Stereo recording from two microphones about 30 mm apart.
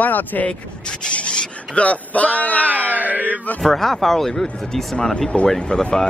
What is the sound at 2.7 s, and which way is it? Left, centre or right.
Music, right.